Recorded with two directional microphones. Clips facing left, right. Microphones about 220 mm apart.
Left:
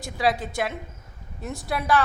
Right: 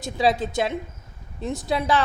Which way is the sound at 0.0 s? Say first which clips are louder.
Right 3 dB; 25° right (ahead or behind).